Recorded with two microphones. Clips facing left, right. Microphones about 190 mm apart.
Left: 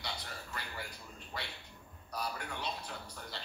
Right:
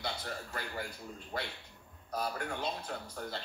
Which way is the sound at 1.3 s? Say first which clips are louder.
Right 5 dB; 50° right (ahead or behind).